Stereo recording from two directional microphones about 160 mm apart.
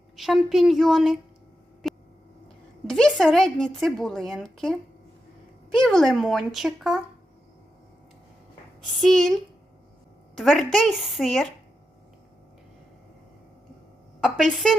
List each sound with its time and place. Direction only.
0.2 s a woman's voice: centre (ahead or behind)
1.8 s a sound: centre (ahead or behind)
2.8 s a woman's voice: 5° left (ahead or behind)
9.0 s a woman's voice: centre (ahead or behind)
14.2 s a woman's voice: centre (ahead or behind)